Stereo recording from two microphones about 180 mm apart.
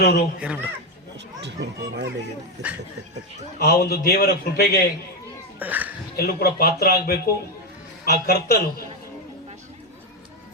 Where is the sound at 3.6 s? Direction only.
60° left (ahead or behind).